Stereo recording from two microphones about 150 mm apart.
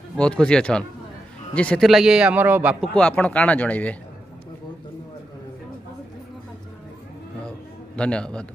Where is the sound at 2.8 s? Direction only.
5° left (ahead or behind).